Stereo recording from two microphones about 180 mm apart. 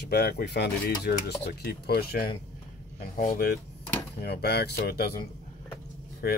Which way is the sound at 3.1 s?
45° left (ahead or behind).